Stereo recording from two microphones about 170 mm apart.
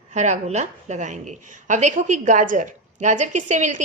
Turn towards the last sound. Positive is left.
turn(degrees=-45)  # may be behind; listen again after turning